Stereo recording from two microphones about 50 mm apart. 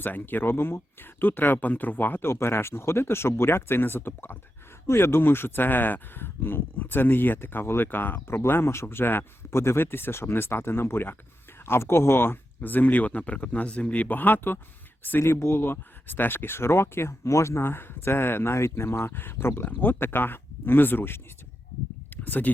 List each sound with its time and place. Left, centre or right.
0.0 s speech: left
2.2 s speech: left
8.3 s speech: left
9.5 s speech: left
12.6 s speech: left
15.3 s speech: left
19.6 s speech: left
22.1 s a sound: left